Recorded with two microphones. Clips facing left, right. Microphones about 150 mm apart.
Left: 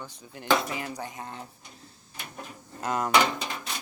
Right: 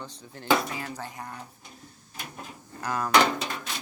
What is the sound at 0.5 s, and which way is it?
Speech, 20° left (ahead or behind).